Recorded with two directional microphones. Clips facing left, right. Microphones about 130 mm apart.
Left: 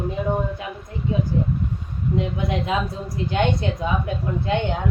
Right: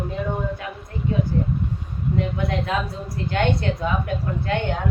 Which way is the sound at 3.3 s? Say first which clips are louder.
Even; 20° left (ahead or behind).